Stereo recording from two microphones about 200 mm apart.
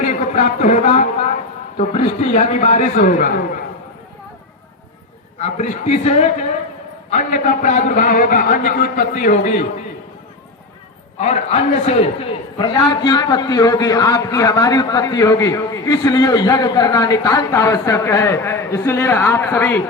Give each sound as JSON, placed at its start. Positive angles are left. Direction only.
{"t": 0.1, "sound": "a man's voice", "side_deg": 35}
{"t": 5.4, "sound": "a man's voice", "side_deg": 35}
{"t": 11.2, "sound": "a man's voice", "side_deg": 35}
{"t": 12.5, "sound": "a man's voice", "side_deg": 20}